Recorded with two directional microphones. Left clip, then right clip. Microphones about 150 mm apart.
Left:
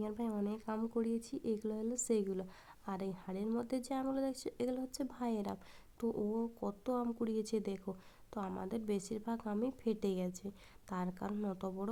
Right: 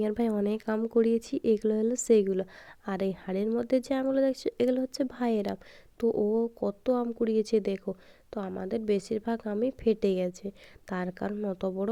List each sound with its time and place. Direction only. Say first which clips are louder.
0.0 s speech: right 12 dB; 45° right (ahead or behind)
11.3 s speech: right 10 dB; 20° right (ahead or behind)